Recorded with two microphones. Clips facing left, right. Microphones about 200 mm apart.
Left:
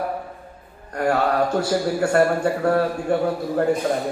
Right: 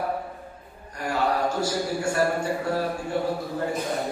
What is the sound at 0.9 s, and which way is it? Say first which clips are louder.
Speech: left 6 dB; 60° left (ahead or behind).